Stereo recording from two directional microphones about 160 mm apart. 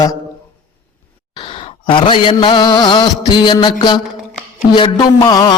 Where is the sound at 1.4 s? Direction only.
30° left (ahead or behind).